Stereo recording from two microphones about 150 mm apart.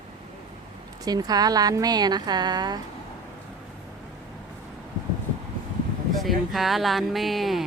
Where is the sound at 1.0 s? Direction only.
25° right (ahead or behind).